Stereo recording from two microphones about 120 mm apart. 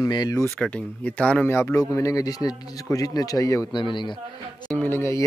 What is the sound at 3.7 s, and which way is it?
Speech, 40° left (ahead or behind).